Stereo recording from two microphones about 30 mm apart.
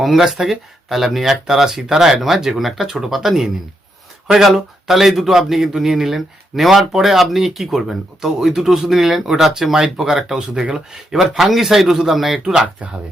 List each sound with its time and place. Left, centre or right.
0.0 s speech: centre
12.8 s speech: right